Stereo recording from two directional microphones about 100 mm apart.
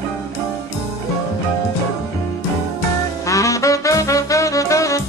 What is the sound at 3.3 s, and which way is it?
Music, 35° left (ahead or behind).